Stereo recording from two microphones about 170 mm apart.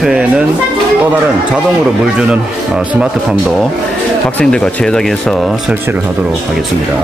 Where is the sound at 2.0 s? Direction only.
5° right (ahead or behind).